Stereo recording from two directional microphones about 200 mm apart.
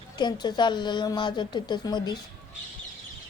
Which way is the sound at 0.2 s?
20° left (ahead or behind).